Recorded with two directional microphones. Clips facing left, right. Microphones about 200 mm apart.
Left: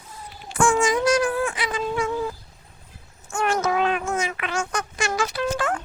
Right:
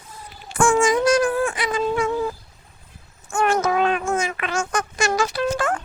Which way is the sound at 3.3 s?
55° right (ahead or behind).